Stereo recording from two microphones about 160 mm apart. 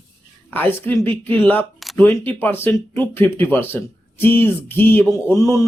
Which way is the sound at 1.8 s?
Centre (ahead or behind).